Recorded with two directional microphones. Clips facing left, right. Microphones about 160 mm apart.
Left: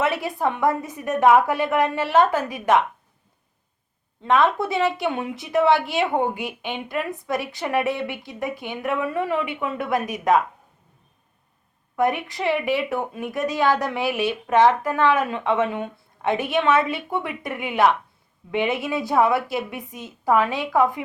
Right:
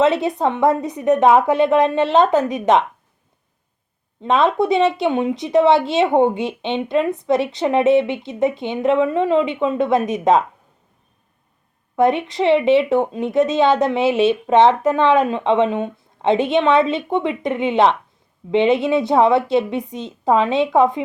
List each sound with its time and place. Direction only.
0.0 s a woman's voice: 20° right (ahead or behind)
4.2 s a woman's voice: 20° right (ahead or behind)
11.9 s a woman's voice: 20° right (ahead or behind)